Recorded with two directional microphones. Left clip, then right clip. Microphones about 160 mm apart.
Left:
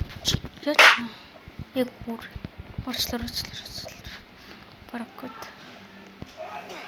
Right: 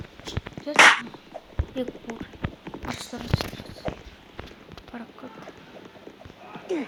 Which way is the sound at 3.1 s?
25° left (ahead or behind).